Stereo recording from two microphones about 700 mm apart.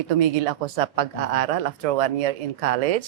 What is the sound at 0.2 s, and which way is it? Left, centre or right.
Speech, right.